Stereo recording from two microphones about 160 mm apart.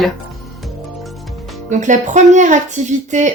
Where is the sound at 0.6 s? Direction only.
Centre (ahead or behind).